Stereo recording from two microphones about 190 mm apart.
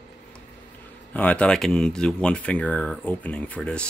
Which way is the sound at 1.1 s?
5° left (ahead or behind).